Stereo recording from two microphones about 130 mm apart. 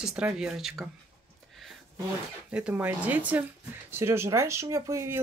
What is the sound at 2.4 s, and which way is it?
Speech, 10° right (ahead or behind).